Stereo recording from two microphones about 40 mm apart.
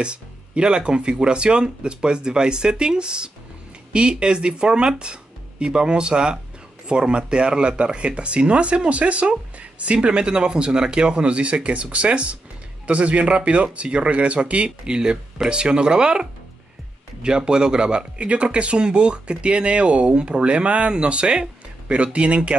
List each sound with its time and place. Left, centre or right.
0.0 s speech: right
15.0 s speech: right